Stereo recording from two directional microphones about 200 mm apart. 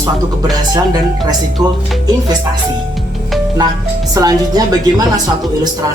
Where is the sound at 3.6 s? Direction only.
20° right (ahead or behind).